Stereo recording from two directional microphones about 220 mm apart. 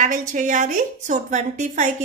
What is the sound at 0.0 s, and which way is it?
A woman's voice, 35° right (ahead or behind).